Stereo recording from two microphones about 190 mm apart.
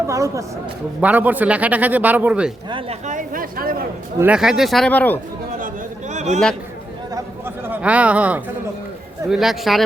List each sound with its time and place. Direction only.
0.1 s speech: 15° right (ahead or behind)
3.1 s speech: 45° right (ahead or behind)
4.2 s speech: 5° right (ahead or behind)
5.5 s a sound: 40° right (ahead or behind)
7.1 s a sound: 10° right (ahead or behind)
9.3 s speech: centre (ahead or behind)